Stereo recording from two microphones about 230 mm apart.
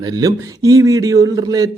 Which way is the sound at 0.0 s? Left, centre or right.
Centre.